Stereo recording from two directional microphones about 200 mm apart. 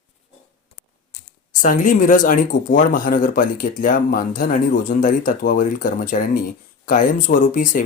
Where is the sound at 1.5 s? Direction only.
40° left (ahead or behind).